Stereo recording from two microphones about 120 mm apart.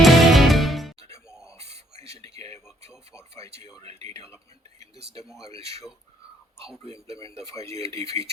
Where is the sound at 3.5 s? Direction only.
60° right (ahead or behind).